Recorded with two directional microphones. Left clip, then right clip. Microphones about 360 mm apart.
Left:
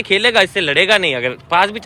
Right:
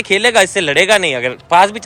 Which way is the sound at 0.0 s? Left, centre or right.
Centre.